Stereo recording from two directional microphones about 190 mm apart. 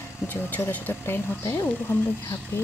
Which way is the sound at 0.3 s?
10° left (ahead or behind).